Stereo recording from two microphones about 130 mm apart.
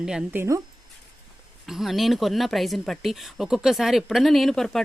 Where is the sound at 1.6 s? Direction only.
Centre (ahead or behind).